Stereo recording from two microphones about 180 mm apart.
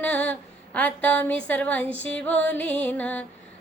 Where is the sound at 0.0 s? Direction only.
10° left (ahead or behind).